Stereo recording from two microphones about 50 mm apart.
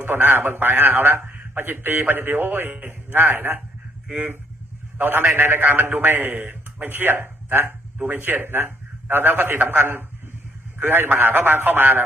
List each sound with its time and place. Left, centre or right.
0.0 s a man's voice: right